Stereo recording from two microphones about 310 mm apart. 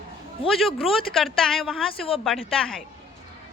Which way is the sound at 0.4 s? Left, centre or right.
Centre.